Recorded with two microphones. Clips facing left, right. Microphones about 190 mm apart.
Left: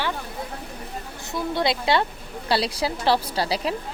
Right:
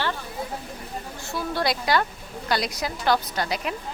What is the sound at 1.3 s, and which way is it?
A woman's voice, 20° left (ahead or behind).